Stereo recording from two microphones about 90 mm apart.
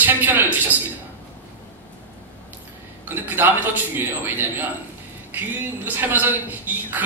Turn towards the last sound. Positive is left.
turn(degrees=-20)  # may be behind; listen again after turning